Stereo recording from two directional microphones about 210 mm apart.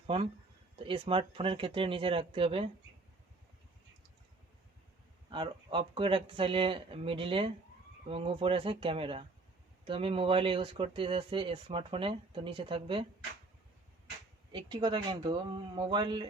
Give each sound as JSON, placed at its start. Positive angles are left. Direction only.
{"t": 0.1, "sound": "speech", "side_deg": -25}
{"t": 5.3, "sound": "speech", "side_deg": -25}
{"t": 14.5, "sound": "speech", "side_deg": -20}